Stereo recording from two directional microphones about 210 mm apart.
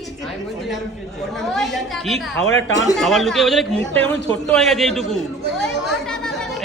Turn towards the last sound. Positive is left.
turn(degrees=0)  # may be behind; listen again after turning